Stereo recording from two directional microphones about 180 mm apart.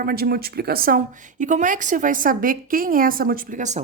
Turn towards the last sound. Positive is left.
turn(degrees=-45)  # may be behind; listen again after turning